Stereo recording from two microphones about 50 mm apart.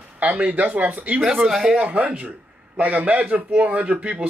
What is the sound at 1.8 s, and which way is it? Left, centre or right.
Speech, right.